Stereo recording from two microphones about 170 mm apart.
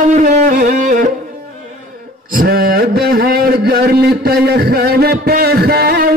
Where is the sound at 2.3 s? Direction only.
60° right (ahead or behind).